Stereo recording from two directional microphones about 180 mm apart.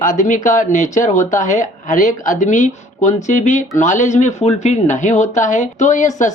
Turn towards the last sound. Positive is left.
turn(degrees=45)  # may be behind; listen again after turning